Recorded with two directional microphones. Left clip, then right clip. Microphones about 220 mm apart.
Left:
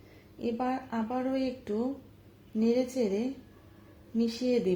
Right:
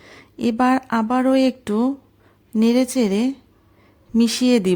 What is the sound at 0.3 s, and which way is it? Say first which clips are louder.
Speech: right 13 dB; 45° right (ahead or behind).